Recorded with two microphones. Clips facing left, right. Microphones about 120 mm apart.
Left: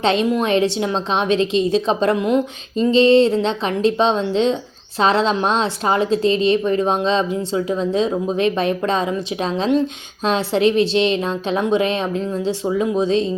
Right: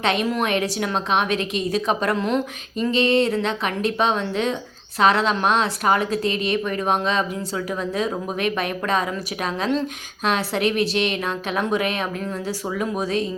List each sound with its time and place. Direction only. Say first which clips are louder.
0.0 s a woman's voice: left 4 dB; 30° left (ahead or behind)
2.1 s speech: left 4 dB; 15° left (ahead or behind)
2.7 s a woman's voice: left 7 dB; 30° left (ahead or behind)